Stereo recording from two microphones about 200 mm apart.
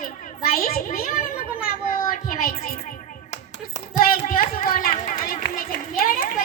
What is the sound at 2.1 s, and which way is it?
Child singing, 45° left (ahead or behind).